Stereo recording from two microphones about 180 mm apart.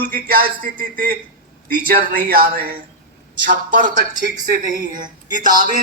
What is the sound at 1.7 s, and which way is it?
Speech, 55° right (ahead or behind).